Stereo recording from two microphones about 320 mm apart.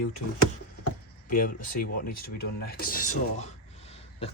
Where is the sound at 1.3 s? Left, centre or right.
Left.